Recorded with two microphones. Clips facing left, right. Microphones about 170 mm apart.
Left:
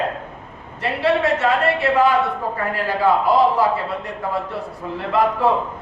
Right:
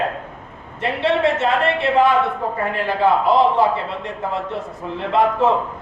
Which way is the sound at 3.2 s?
25° right (ahead or behind).